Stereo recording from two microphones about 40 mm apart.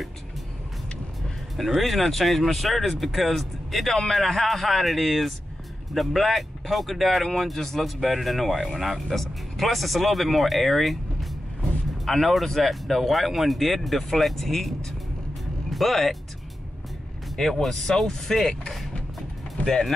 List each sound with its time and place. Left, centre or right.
1.6 s speech: centre
15.7 s speech: centre
17.4 s speech: centre
19.6 s speech: centre